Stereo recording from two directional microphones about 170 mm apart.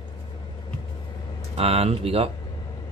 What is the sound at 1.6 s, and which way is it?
Speech, 35° right (ahead or behind).